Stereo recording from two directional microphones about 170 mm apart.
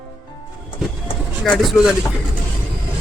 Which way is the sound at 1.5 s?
Centre (ahead or behind).